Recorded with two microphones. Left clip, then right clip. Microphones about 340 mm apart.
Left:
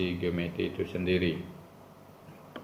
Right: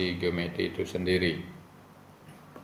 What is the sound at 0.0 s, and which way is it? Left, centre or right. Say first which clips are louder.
Speech: right 2 dB; right.